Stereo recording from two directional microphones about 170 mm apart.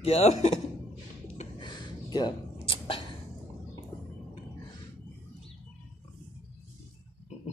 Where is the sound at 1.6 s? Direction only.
25° left (ahead or behind).